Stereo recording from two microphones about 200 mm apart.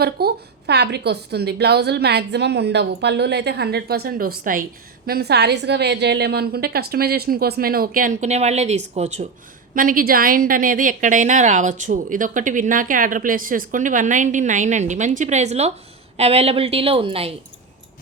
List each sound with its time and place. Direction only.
0.0 s a woman's voice: 50° right (ahead or behind); by 17.3 s 30° right (ahead or behind)